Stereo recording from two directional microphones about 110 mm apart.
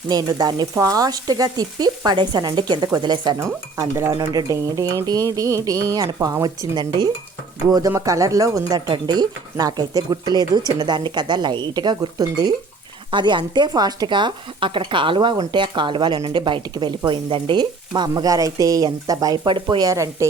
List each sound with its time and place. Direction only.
0.1 s speech: 35° right (ahead or behind)
3.3 s stir: 25° right (ahead or behind)
4.1 s speech: 35° right (ahead or behind)
19.7 s stir: 30° right (ahead or behind)